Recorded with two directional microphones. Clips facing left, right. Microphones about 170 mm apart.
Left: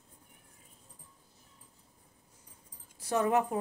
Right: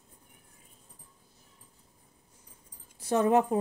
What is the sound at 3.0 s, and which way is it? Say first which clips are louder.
Speech: right 4 dB; 25° right (ahead or behind).